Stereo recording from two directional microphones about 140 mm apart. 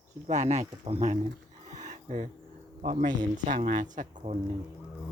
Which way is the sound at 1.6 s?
60° right (ahead or behind).